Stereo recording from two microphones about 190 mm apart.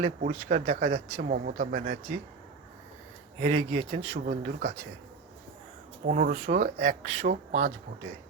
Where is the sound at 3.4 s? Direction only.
40° right (ahead or behind).